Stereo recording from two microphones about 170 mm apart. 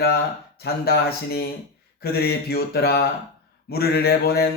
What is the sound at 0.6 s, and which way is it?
Speech, 65° left (ahead or behind).